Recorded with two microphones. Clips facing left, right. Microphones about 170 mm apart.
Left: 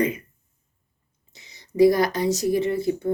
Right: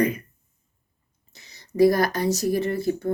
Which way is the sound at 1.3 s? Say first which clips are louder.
Even; 20° left (ahead or behind).